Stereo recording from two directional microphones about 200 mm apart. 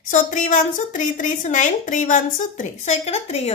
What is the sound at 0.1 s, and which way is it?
A woman's voice, 40° left (ahead or behind).